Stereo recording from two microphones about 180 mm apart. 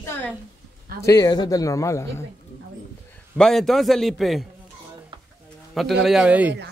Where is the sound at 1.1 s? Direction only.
20° left (ahead or behind).